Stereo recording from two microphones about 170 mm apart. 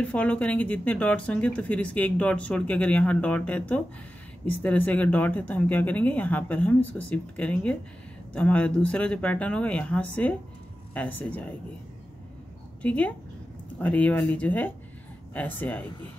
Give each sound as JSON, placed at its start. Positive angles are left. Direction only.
{"t": 0.0, "sound": "speech", "side_deg": 10}
{"t": 12.8, "sound": "speech", "side_deg": 10}